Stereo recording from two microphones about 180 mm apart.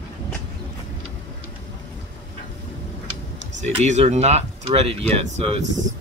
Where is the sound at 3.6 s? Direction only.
40° right (ahead or behind).